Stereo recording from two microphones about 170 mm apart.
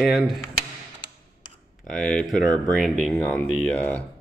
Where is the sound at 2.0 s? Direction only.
5° left (ahead or behind).